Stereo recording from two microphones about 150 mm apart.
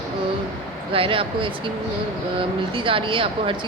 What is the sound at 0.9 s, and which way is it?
Speech, 35° right (ahead or behind).